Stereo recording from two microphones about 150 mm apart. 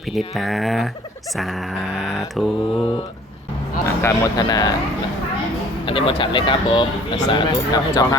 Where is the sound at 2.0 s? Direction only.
Centre (ahead or behind).